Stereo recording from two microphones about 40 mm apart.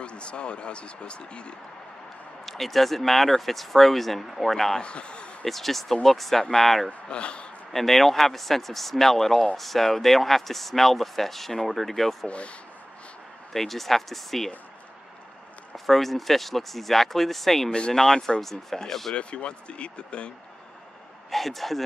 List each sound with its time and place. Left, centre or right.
0.0 s speech: left
2.4 s speech: centre
4.8 s speech: left
5.4 s speech: centre
6.9 s speech: left
7.7 s speech: centre
13.5 s speech: centre
15.7 s speech: centre
17.6 s speech: left
17.9 s speech: centre
19.1 s speech: left
21.3 s a man's voice: centre